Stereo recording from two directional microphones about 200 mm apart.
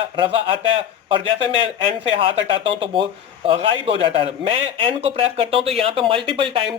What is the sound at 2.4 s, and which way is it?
A man's voice, 25° right (ahead or behind).